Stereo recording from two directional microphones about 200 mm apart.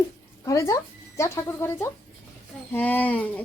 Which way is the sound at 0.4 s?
15° left (ahead or behind).